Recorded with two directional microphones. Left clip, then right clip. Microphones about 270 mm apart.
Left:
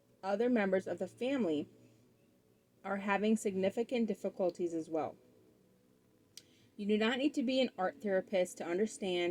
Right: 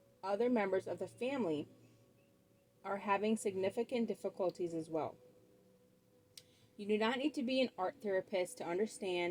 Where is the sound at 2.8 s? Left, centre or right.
Left.